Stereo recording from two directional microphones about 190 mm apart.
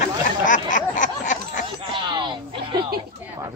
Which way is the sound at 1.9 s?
25° right (ahead or behind).